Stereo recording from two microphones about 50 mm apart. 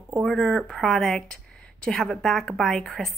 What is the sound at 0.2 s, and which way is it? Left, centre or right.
A woman's voice, centre.